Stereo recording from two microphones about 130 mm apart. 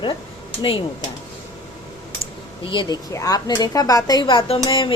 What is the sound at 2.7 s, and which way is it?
Speech, 40° left (ahead or behind).